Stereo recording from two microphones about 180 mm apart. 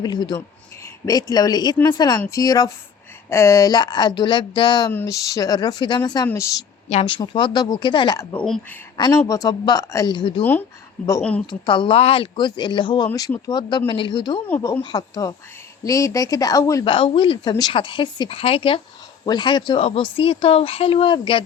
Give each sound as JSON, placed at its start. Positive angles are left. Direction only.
{"t": 0.0, "sound": "speech", "side_deg": 25}
{"t": 4.9, "sound": "speech", "side_deg": 15}
{"t": 6.8, "sound": "speech", "side_deg": 35}
{"t": 8.4, "sound": "speech", "side_deg": 0}
{"t": 9.0, "sound": "speech", "side_deg": 20}
{"t": 11.0, "sound": "speech", "side_deg": 10}
{"t": 11.6, "sound": "speech", "side_deg": 25}
{"t": 16.8, "sound": "speech", "side_deg": 30}